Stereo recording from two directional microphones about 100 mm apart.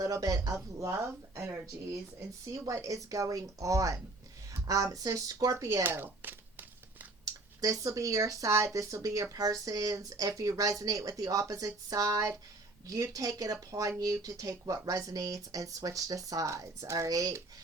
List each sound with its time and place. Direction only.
0.0 s speech: 35° right (ahead or behind)
7.3 s speech: 35° right (ahead or behind)